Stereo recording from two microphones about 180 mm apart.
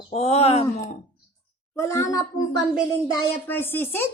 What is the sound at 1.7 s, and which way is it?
Speech, 15° left (ahead or behind).